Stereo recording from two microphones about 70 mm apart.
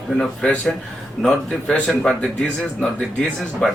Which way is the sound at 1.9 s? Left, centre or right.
Centre.